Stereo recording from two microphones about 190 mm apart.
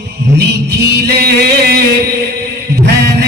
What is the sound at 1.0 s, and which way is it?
Music, 60° right (ahead or behind).